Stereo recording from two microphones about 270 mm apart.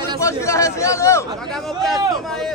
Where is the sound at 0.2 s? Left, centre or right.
Centre.